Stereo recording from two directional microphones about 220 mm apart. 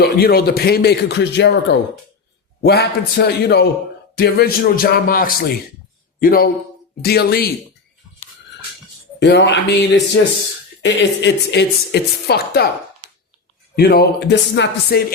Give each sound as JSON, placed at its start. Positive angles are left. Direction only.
{"t": 0.0, "sound": "a woman's voice", "side_deg": 45}
{"t": 9.2, "sound": "a woman's voice", "side_deg": 55}
{"t": 13.7, "sound": "a woman's voice", "side_deg": 45}